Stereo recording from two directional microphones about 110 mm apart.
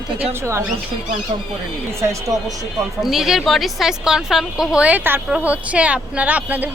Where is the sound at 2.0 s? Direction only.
30° right (ahead or behind).